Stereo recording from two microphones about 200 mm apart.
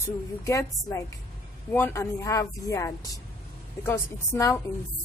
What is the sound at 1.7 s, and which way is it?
Speech, 15° left (ahead or behind).